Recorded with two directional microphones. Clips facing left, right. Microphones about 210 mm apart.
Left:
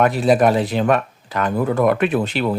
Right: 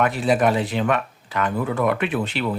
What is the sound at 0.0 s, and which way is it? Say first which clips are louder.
Speech: left 4 dB; 40° left (ahead or behind).